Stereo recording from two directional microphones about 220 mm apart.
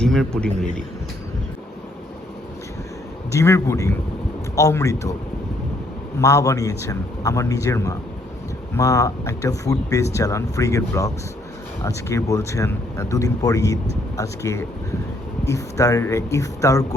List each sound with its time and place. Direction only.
0.0 s speech: centre (ahead or behind)
3.3 s speech: 10° left (ahead or behind)
6.1 s speech: 15° left (ahead or behind)